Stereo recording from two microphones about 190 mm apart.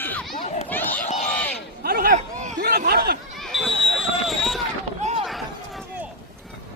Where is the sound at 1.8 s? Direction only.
50° right (ahead or behind).